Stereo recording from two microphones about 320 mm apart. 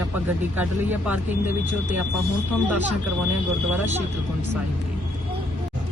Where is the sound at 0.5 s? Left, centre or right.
Centre.